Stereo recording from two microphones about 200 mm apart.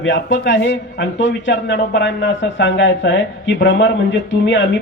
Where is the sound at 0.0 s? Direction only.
65° left (ahead or behind).